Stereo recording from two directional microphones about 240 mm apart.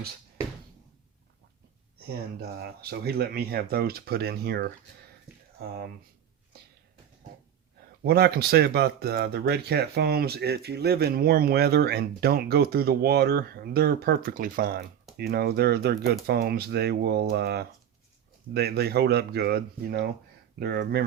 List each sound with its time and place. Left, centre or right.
2.0 s speech: right
8.0 s speech: right